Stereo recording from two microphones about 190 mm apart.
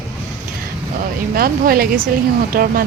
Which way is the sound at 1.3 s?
50° right (ahead or behind).